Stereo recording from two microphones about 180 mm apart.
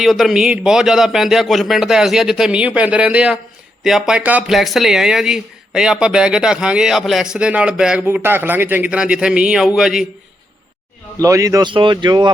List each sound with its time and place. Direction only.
0.0 s speech: centre (ahead or behind)
11.2 s speech: 15° right (ahead or behind)